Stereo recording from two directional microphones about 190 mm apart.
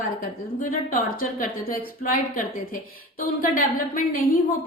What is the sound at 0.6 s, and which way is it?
A woman's voice, 50° left (ahead or behind).